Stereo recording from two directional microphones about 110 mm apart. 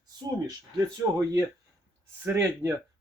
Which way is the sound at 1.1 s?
30° right (ahead or behind).